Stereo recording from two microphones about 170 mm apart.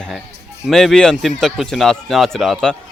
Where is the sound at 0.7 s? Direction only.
Centre (ahead or behind).